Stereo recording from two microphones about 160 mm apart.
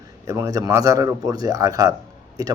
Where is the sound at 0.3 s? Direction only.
20° right (ahead or behind).